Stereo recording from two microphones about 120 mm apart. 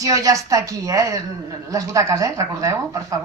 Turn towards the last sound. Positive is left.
turn(degrees=-25)  # may be behind; listen again after turning